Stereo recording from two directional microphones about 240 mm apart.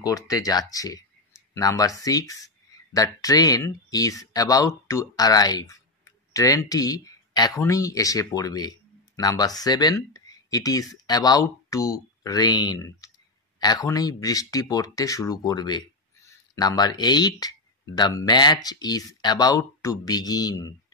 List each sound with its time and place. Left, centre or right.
0.0 s speech: centre